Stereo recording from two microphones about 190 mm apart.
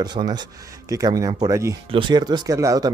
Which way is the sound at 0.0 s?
20° right (ahead or behind).